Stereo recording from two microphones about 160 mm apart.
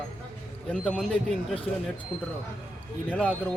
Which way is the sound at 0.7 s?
5° left (ahead or behind).